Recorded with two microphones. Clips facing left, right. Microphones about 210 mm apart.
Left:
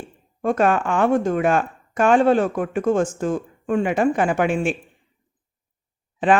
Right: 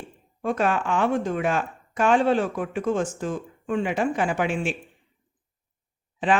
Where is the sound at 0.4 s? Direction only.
50° left (ahead or behind).